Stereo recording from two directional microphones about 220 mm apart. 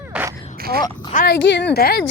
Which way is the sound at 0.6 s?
45° right (ahead or behind).